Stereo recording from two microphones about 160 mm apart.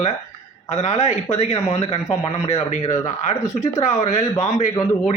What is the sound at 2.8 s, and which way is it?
Speech, 20° left (ahead or behind).